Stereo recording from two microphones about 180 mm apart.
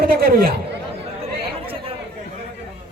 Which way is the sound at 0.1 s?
55° right (ahead or behind).